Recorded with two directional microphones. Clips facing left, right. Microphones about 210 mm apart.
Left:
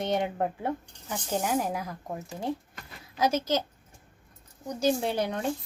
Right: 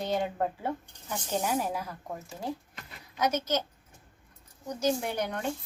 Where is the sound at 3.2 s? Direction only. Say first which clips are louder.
Left 2 dB; 30° left (ahead or behind).